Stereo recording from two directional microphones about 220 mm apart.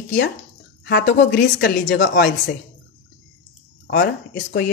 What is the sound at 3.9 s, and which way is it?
Speech, 45° left (ahead or behind).